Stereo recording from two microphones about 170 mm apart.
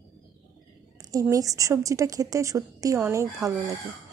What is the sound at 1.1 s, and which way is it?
A woman's voice, 20° right (ahead or behind).